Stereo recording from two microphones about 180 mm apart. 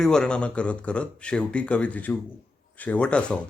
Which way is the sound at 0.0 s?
5° left (ahead or behind).